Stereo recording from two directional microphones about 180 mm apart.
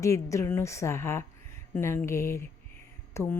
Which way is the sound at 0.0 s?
15° left (ahead or behind).